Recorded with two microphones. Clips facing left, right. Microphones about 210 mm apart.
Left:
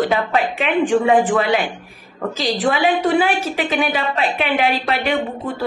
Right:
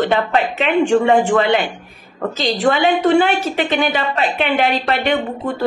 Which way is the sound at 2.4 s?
5° left (ahead or behind).